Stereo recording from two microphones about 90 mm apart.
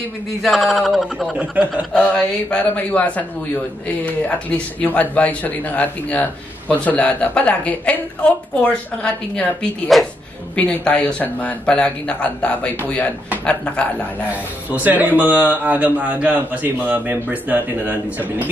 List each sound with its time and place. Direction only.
0.4 s speech: centre (ahead or behind)
1.4 s a man's voice: 15° right (ahead or behind)
2.0 s speech: 15° left (ahead or behind)
14.3 s a man's voice: 20° right (ahead or behind)